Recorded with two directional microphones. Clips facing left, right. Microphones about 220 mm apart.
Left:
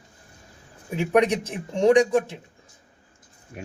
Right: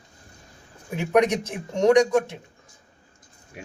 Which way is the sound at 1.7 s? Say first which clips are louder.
Even; 30° left (ahead or behind).